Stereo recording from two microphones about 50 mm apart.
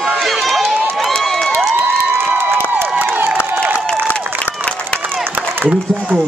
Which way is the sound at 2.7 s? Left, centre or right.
Right.